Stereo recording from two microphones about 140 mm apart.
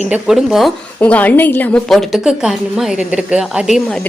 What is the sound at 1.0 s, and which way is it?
A woman's voice, 10° left (ahead or behind).